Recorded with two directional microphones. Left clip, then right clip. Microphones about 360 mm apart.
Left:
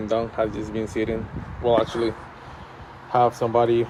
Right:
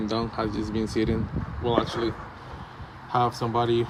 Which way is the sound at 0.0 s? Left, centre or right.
Centre.